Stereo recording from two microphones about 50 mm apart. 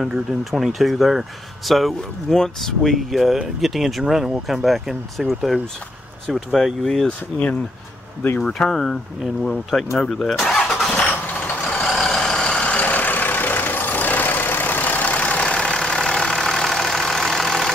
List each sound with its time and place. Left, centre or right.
0.7 s speech: centre
7.1 s speech: left
8.4 s speech: centre
10.9 s vehicle: centre
11.8 s vehicle: centre; by 15.4 s left
15.4 s vehicle: centre